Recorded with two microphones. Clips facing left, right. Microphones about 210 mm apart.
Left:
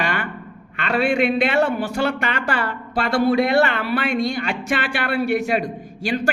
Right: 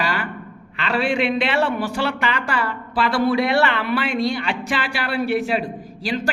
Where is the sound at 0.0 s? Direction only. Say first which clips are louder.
Even; 50° left (ahead or behind).